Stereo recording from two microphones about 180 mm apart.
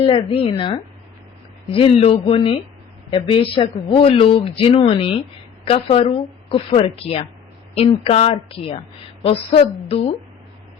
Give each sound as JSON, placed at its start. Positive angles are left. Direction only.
{"t": 0.0, "sound": "speech", "side_deg": 30}